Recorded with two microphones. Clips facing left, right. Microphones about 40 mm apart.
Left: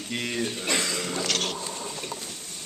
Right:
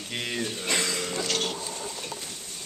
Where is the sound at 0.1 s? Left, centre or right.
Centre.